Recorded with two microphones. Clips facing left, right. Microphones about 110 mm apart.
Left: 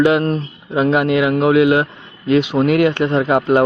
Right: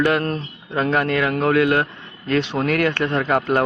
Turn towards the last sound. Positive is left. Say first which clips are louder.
# left 5 dB
turn(degrees=20)  # may be behind; listen again after turning